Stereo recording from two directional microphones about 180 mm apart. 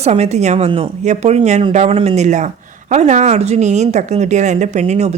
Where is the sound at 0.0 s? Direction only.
35° right (ahead or behind).